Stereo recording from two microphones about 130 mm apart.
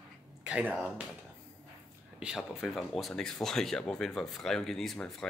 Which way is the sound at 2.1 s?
5° right (ahead or behind).